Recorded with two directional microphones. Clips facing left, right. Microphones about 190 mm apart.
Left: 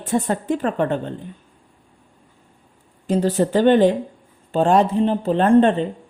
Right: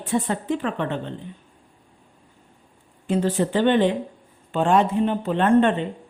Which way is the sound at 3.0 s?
40° left (ahead or behind).